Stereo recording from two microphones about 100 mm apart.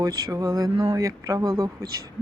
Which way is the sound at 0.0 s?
35° right (ahead or behind).